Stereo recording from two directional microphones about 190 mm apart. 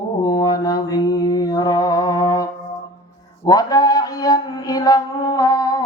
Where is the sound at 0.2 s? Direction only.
20° left (ahead or behind).